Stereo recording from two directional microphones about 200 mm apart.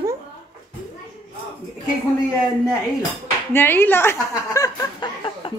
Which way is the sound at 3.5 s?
10° left (ahead or behind).